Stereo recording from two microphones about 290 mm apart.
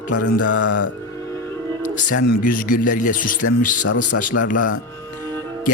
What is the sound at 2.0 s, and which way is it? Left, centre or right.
Speech, left.